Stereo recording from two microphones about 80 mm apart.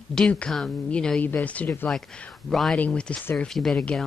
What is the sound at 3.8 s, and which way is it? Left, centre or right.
Speech, centre.